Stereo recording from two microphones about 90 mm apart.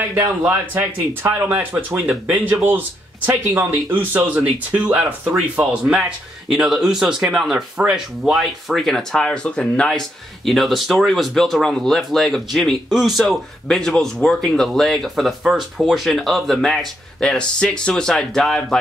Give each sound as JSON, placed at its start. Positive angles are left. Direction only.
{"t": 0.1, "sound": "speech", "side_deg": -25}